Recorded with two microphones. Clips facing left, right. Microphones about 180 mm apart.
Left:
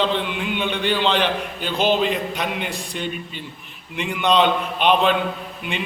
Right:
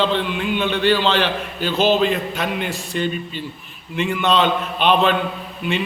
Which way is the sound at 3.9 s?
15° left (ahead or behind).